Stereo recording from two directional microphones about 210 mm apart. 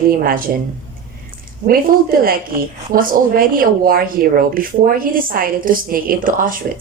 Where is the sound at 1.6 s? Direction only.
45° right (ahead or behind).